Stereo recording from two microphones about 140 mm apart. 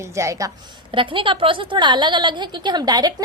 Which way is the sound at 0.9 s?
35° right (ahead or behind).